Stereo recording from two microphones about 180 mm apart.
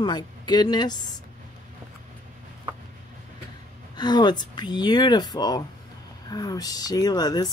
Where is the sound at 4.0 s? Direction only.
25° left (ahead or behind).